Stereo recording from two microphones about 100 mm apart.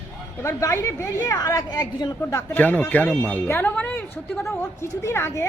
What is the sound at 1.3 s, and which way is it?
A woman's voice, 40° left (ahead or behind).